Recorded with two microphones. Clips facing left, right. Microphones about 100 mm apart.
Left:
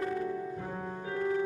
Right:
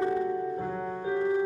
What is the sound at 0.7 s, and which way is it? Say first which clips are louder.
Music: right 5 dB; 5° right (ahead or behind).